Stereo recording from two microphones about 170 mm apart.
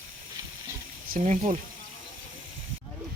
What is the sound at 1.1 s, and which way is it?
Speech, 45° right (ahead or behind).